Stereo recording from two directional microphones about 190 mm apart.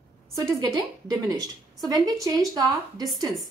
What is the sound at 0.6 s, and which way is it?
Speech, 20° right (ahead or behind).